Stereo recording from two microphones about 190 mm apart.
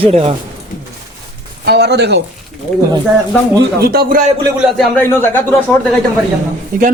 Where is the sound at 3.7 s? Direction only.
55° right (ahead or behind).